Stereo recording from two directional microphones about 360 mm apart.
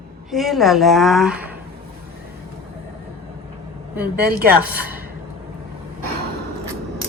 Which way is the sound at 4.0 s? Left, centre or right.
Right.